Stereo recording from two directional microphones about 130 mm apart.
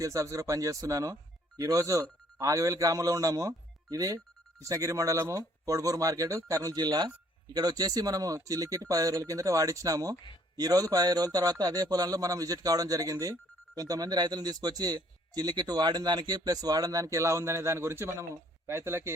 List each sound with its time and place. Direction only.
0.0 s a man's voice: 25° right (ahead or behind)